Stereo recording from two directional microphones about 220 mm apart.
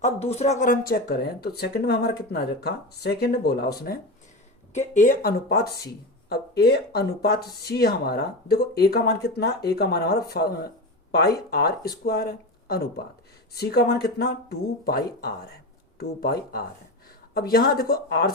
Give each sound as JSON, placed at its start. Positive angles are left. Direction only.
{"t": 0.0, "sound": "speech", "side_deg": 30}
{"t": 4.7, "sound": "speech", "side_deg": 35}